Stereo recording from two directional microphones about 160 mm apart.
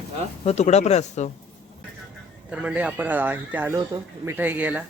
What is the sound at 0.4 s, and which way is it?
Speech, 45° left (ahead or behind).